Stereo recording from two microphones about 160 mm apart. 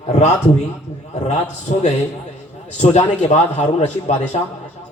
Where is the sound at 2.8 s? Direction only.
45° left (ahead or behind).